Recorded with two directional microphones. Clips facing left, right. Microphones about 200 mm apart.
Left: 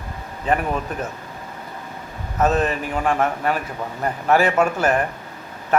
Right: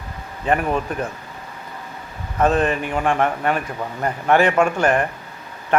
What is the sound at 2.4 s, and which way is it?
A man's voice, 5° left (ahead or behind).